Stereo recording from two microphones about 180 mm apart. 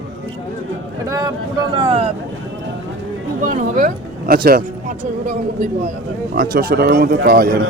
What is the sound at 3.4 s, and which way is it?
Speech, 45° right (ahead or behind).